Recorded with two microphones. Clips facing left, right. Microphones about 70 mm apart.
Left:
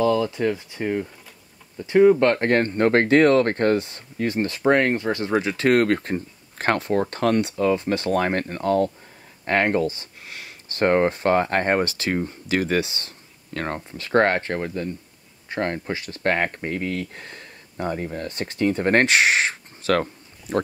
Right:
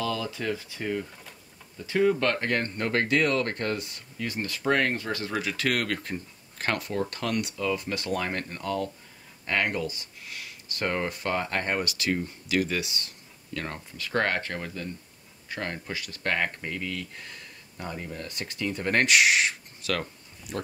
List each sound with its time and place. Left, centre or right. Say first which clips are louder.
0.0 s speech: left 10 dB; left